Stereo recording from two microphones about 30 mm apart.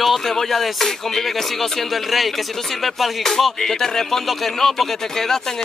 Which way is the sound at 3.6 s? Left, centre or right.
Centre.